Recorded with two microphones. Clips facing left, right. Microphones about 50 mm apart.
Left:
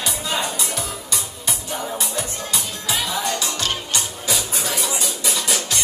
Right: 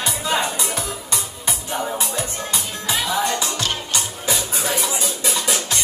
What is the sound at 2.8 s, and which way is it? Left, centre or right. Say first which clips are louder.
Music: right 3 dB; centre.